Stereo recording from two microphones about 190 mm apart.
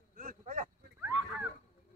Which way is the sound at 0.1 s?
45° right (ahead or behind).